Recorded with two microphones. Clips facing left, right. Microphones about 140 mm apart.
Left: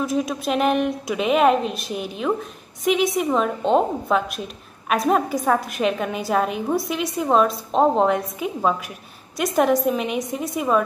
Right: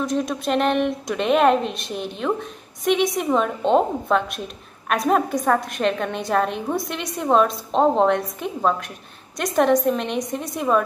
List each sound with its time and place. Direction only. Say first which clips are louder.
0.0 s a woman's voice: even; 5° left (ahead or behind)